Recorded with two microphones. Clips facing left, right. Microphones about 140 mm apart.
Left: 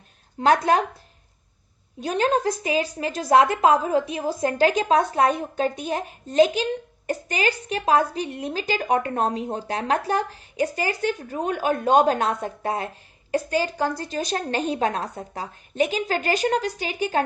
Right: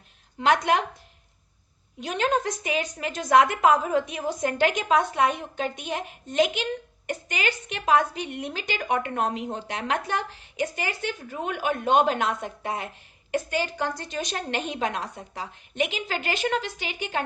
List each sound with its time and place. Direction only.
0.3 s a woman's voice: 35° left (ahead or behind)
2.0 s a woman's voice: 35° left (ahead or behind)